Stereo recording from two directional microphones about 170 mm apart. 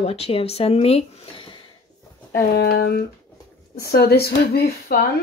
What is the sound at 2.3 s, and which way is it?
Speech, 70° left (ahead or behind).